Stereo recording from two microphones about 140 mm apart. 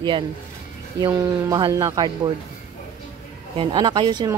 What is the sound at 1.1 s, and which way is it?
Speech, 20° right (ahead or behind).